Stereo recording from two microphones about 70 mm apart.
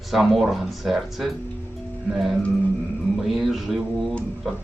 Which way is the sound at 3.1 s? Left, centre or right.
Centre.